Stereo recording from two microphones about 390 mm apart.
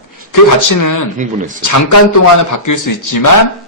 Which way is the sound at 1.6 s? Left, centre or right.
Left.